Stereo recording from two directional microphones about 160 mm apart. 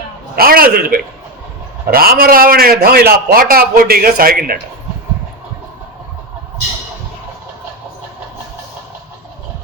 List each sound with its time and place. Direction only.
0.3 s a man's voice: 70° right (ahead or behind)